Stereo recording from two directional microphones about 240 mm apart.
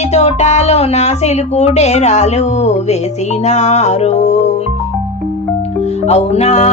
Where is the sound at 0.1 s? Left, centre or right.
Left.